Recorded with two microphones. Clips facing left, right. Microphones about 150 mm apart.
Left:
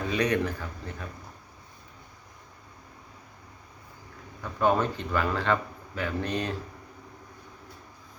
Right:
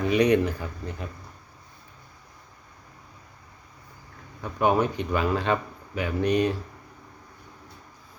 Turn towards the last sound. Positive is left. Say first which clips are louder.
# right 7 dB
turn(degrees=-15)  # may be behind; listen again after turning